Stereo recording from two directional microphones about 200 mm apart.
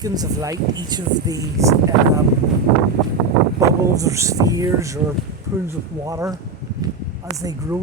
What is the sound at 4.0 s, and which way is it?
Speech, 15° right (ahead or behind).